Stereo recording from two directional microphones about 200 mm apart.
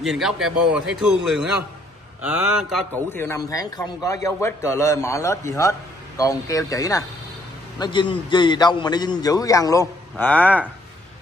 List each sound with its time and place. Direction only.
0.0 s speech: centre (ahead or behind)
2.9 s a man's voice: 10° left (ahead or behind)